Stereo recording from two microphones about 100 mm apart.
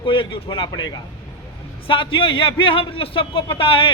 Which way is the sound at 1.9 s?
60° left (ahead or behind).